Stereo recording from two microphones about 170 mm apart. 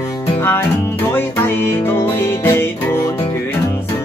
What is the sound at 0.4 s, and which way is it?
Music, 15° left (ahead or behind).